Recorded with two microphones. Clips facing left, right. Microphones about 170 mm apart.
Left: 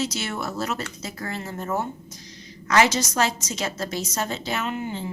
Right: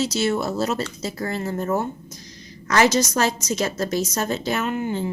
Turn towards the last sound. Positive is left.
turn(degrees=-50)  # may be behind; listen again after turning